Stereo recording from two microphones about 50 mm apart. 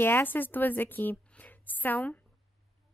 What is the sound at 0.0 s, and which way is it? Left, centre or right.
A woman's voice, left.